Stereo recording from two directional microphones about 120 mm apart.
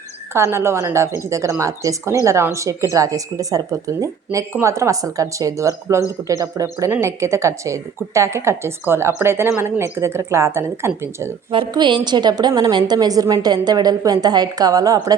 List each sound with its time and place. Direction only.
0.3 s speech: 20° right (ahead or behind)
11.5 s a woman's voice: 40° right (ahead or behind)